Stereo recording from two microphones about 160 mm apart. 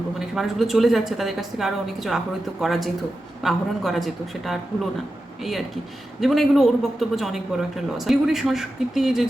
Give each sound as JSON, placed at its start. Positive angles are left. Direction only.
{"t": 0.2, "sound": "a man's voice", "side_deg": 0}